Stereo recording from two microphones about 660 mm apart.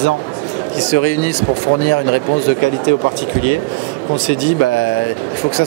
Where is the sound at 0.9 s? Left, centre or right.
Centre.